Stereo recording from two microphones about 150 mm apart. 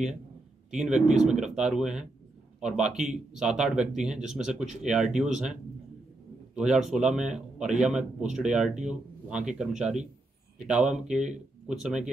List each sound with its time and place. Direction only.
0.7 s speech: 5° right (ahead or behind)